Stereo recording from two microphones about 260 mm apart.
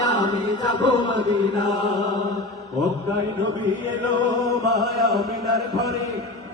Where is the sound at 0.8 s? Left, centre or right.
Centre.